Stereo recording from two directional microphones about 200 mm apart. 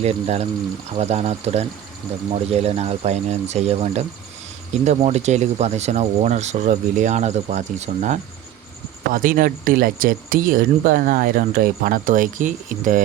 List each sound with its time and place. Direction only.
0.0 s speech: 30° right (ahead or behind)